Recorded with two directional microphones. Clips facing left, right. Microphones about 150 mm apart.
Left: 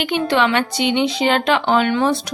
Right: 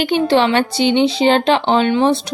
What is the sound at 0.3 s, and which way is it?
Speech, 30° right (ahead or behind).